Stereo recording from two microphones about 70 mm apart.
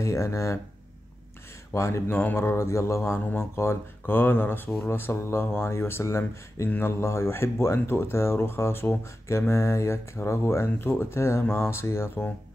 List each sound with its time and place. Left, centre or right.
0.0 s speech: left
1.7 s speech: left
3.0 s speech: left